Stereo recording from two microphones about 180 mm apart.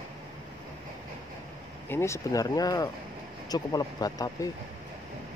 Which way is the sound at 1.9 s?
15° left (ahead or behind).